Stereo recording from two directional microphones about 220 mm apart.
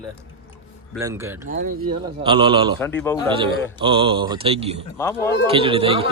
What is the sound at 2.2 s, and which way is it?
Speech, 25° right (ahead or behind).